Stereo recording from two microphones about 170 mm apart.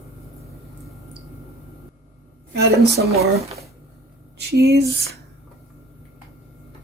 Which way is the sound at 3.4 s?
40° right (ahead or behind).